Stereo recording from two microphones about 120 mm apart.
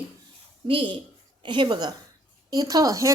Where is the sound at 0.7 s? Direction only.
45° right (ahead or behind).